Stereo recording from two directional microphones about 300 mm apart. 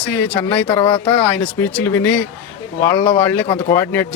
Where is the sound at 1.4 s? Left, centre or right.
Centre.